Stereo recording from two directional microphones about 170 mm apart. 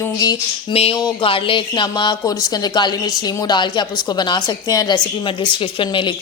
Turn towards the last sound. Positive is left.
turn(degrees=30)  # may be behind; listen again after turning